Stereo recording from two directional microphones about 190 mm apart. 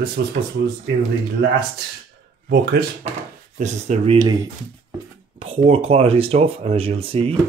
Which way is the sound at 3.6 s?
35° right (ahead or behind).